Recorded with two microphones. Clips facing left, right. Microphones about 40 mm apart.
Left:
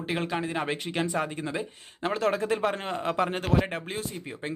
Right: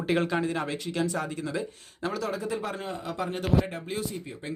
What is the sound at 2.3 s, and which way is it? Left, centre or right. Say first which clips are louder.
Speech: left 5 dB; left.